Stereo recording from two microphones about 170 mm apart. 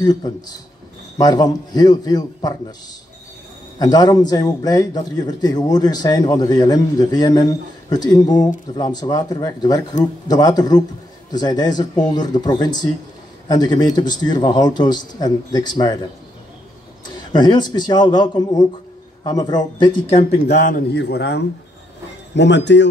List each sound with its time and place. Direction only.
0.0 s a man's voice: 25° left (ahead or behind)
3.8 s a man's voice: 25° left (ahead or behind)
17.0 s a man's voice: 25° left (ahead or behind)
20.4 s a man's voice: 55° left (ahead or behind)
20.9 s a man's voice: 90° left